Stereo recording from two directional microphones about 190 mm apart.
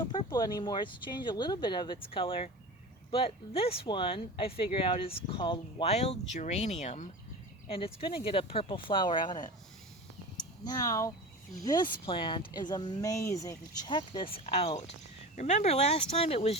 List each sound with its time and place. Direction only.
0.1 s speech: 20° left (ahead or behind)
10.6 s speech: 20° left (ahead or behind)